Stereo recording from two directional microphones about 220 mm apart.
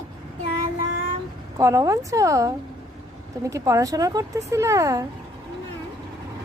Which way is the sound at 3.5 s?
15° right (ahead or behind).